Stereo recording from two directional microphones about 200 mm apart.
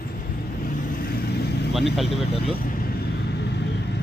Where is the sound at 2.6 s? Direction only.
45° left (ahead or behind).